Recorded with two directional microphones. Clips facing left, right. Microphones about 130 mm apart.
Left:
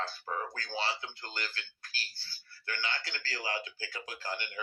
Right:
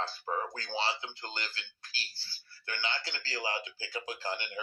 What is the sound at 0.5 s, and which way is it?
A man's voice, 25° right (ahead or behind).